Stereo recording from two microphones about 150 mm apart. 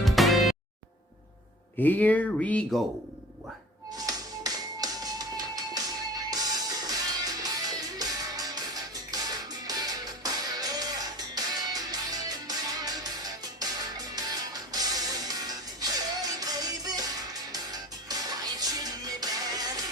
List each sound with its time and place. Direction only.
0.0 s music: centre (ahead or behind)
1.8 s speech: 10° left (ahead or behind)
3.9 s music: 25° right (ahead or behind)